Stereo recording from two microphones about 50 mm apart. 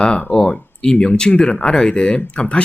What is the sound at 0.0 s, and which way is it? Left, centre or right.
Speech, centre.